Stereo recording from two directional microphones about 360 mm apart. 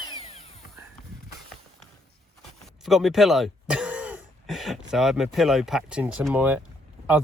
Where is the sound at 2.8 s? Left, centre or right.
Centre.